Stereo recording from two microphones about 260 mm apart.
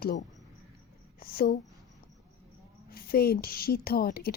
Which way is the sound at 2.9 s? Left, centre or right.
Left.